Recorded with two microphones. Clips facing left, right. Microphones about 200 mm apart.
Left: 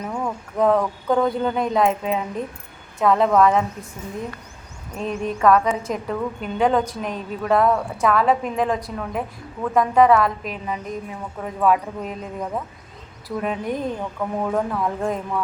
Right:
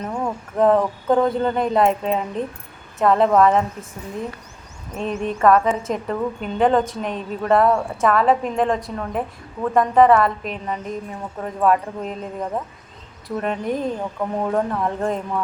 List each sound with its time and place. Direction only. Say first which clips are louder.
0.1 s a woman's voice: right 1 dB; 5° right (ahead or behind)
4.9 s a woman's voice: right 1 dB; centre (ahead or behind)